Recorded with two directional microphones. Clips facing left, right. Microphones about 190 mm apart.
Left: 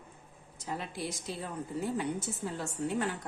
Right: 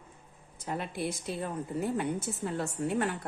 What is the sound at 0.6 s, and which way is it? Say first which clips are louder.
A woman's voice: right 3 dB; 55° right (ahead or behind).